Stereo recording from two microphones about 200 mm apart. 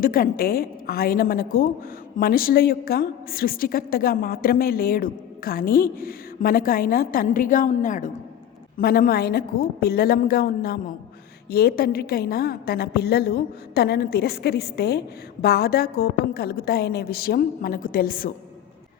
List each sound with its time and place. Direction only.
0.0 s a woman's voice: 45° left (ahead or behind)
8.8 s a woman's voice: 50° left (ahead or behind)